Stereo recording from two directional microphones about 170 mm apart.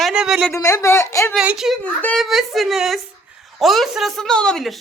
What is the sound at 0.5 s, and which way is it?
Speech, 20° left (ahead or behind).